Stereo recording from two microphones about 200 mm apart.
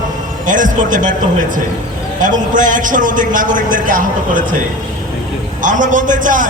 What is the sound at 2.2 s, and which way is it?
A man's voice, 40° right (ahead or behind).